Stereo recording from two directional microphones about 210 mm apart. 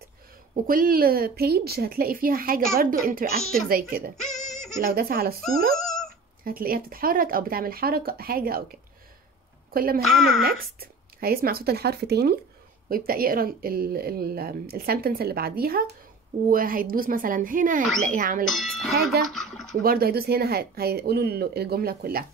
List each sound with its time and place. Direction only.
0.7 s speech: 45° right (ahead or behind)
5.8 s dog: centre (ahead or behind)
6.4 s speech: 45° right (ahead or behind)
10.0 s speech: centre (ahead or behind)
10.4 s speech: 45° right (ahead or behind)
18.5 s speech: centre (ahead or behind)
19.3 s a sound: centre (ahead or behind)
19.8 s speech: 45° right (ahead or behind)